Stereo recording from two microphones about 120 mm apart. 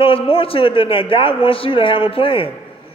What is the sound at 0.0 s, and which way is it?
A man's voice, 50° left (ahead or behind).